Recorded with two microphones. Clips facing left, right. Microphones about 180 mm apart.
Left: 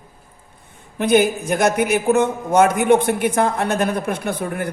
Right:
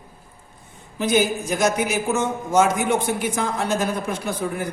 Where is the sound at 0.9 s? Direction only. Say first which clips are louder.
Left 4 dB; 60° left (ahead or behind).